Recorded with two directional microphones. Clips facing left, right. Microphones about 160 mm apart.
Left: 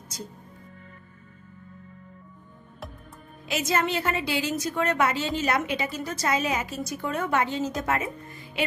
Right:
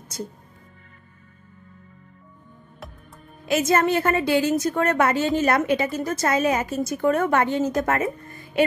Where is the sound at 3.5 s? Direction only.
50° right (ahead or behind).